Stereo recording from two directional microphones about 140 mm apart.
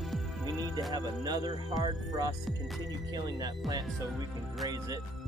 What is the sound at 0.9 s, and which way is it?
Speech, 30° right (ahead or behind).